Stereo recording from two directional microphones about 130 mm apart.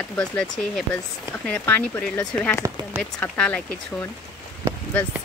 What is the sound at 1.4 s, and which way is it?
Speech, 15° left (ahead or behind).